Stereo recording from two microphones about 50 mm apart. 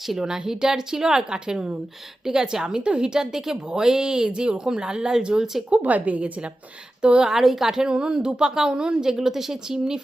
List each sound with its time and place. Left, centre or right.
0.1 s a woman's voice: centre
5.7 s a woman's voice: right
7.0 s a woman's voice: centre